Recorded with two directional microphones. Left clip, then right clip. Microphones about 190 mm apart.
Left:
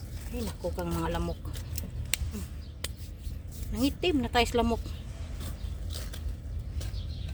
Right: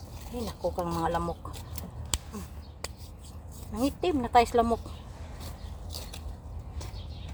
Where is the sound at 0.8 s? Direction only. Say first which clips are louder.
Right 4 dB; 40° left (ahead or behind).